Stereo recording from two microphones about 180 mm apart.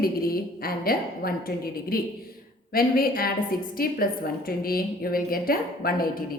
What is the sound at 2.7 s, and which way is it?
A woman's voice, 55° left (ahead or behind).